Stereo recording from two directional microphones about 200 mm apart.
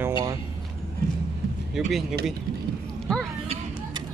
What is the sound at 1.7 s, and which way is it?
Speech, centre (ahead or behind).